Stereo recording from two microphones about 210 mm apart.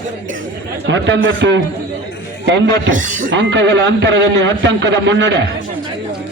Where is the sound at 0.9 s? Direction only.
60° right (ahead or behind).